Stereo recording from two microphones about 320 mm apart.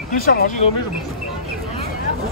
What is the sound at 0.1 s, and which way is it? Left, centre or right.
Speech, left.